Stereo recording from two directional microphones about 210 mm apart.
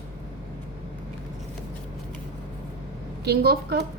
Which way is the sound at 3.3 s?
50° right (ahead or behind).